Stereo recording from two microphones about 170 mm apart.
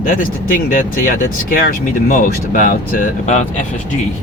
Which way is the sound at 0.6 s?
55° left (ahead or behind).